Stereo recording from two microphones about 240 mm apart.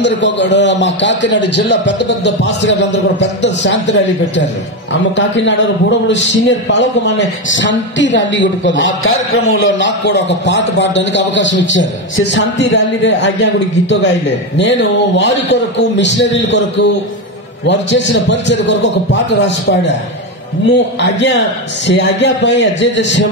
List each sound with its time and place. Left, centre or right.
0.0 s a man's voice: left
5.1 s a man's voice: left
21.0 s a man's voice: left